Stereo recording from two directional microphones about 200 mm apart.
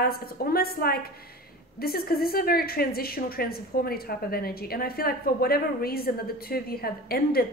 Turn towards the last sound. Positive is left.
turn(degrees=50)  # may be behind; listen again after turning